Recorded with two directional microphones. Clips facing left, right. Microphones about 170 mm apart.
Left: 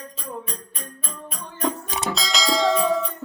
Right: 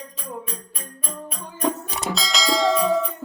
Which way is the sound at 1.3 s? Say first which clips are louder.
Right 1 dB; centre (ahead or behind).